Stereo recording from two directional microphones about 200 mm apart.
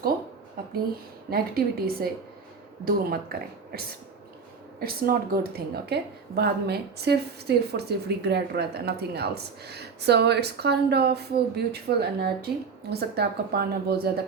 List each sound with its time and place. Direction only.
1.3 s speech: 50° right (ahead or behind)